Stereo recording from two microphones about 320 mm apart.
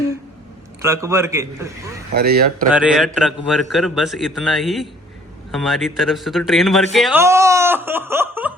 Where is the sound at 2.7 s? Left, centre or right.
Centre.